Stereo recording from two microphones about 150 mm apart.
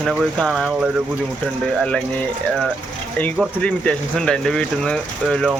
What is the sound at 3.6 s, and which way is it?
Speech, 5° left (ahead or behind).